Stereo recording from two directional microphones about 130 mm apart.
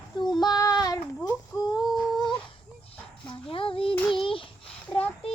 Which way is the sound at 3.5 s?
45° left (ahead or behind).